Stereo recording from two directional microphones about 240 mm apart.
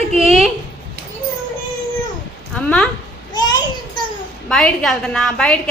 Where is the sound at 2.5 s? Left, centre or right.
Centre.